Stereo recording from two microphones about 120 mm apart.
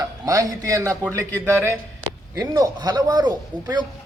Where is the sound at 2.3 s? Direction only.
30° right (ahead or behind).